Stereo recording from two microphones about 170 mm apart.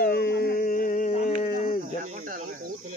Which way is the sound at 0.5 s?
50° left (ahead or behind).